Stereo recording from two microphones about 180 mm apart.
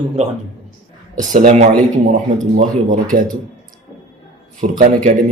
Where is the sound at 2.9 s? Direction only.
50° right (ahead or behind).